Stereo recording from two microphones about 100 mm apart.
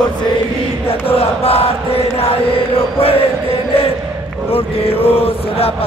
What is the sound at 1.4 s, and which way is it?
Chant, 80° left.